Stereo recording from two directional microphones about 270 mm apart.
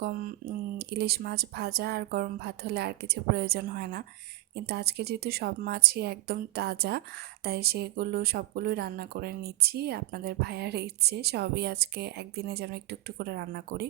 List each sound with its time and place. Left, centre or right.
0.8 s speech: right